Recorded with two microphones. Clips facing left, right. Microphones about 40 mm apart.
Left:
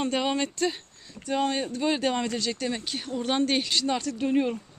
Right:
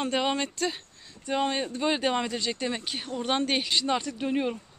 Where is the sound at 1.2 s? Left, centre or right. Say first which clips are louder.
Left 1 dB; centre.